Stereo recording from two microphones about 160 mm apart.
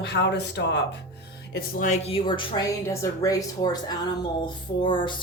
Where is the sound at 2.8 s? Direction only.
20° left (ahead or behind).